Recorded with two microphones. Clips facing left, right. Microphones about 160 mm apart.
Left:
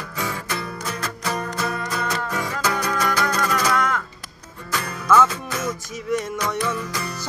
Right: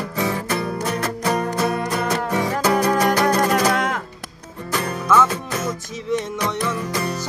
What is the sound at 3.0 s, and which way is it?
Music, 40° right (ahead or behind).